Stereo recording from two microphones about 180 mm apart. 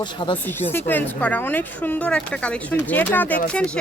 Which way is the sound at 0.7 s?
10° left (ahead or behind).